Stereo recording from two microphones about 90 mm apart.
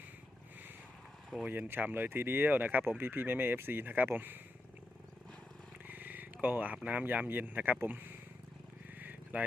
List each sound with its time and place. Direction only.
1.5 s speech: 25° right (ahead or behind)
5.9 s roaring cats: 20° right (ahead or behind)
6.8 s speech: 20° right (ahead or behind)
9.0 s vehicle: 20° right (ahead or behind)